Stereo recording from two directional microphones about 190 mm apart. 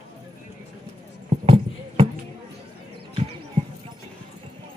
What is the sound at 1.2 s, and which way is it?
Clip-clop, 30° right (ahead or behind).